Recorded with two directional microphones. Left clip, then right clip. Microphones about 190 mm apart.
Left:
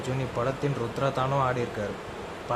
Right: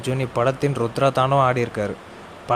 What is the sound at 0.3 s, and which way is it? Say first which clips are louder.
Speech: right 9 dB; 40° right (ahead or behind).